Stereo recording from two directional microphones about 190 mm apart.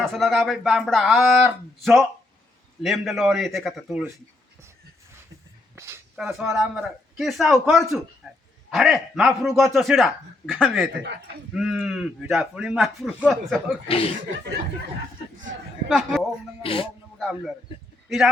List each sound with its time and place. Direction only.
0.0 s speech: centre (ahead or behind)
5.7 s a sound: 15° right (ahead or behind)
6.1 s a man's voice: centre (ahead or behind)
13.8 s speech: 30° left (ahead or behind)
15.9 s speech: centre (ahead or behind)